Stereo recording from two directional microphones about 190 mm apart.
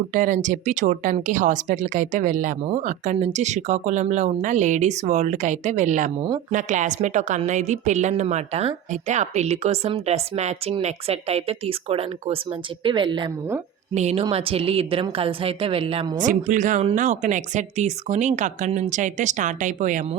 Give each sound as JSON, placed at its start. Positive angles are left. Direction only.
{"t": 0.1, "sound": "a woman's voice", "side_deg": -45}
{"t": 13.9, "sound": "a woman's voice", "side_deg": -35}
{"t": 16.3, "sound": "a woman's voice", "side_deg": -40}